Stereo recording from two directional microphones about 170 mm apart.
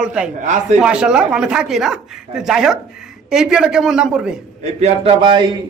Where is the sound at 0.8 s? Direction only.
5° right (ahead or behind).